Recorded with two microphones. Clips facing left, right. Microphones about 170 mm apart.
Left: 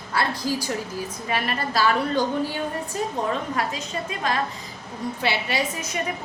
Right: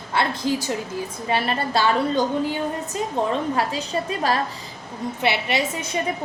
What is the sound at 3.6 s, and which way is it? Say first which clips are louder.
Speech: right 4 dB; 35° right (ahead or behind).